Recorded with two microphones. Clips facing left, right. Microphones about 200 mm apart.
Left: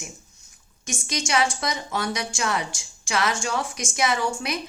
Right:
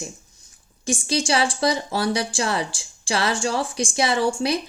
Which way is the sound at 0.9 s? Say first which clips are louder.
Right 6 dB; 30° right (ahead or behind).